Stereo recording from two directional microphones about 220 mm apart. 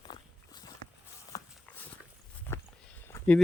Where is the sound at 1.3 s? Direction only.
15° left (ahead or behind).